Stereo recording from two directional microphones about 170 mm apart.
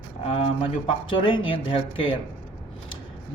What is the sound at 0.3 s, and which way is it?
Speech, 35° left (ahead or behind).